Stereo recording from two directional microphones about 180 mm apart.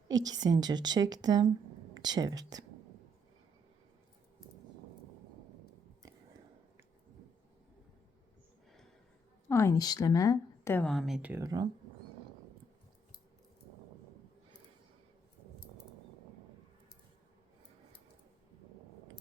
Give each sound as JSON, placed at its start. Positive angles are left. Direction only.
{"t": 0.1, "sound": "a woman's voice", "side_deg": -20}
{"t": 9.5, "sound": "a woman's voice", "side_deg": 15}
{"t": 10.8, "sound": "speech", "side_deg": 0}